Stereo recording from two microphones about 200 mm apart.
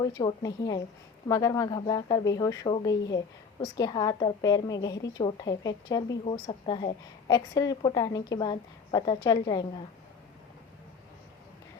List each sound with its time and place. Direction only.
0.0 s a woman's voice: 20° left (ahead or behind)